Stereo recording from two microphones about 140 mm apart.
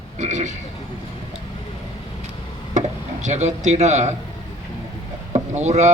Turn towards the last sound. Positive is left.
turn(degrees=-55)  # may be behind; listen again after turning